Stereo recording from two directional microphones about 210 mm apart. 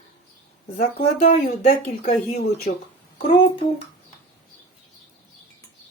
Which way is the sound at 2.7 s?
45° left (ahead or behind).